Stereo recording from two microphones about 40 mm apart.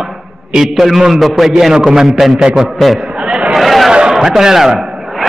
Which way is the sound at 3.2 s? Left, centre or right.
Right.